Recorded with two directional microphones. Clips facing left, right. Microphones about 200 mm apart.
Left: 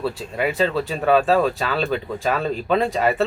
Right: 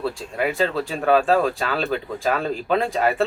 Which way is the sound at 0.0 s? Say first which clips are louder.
Left 1 dB; centre (ahead or behind).